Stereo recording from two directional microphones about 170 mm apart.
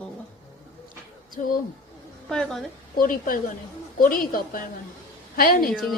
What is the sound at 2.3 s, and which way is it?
Speech, 5° left (ahead or behind).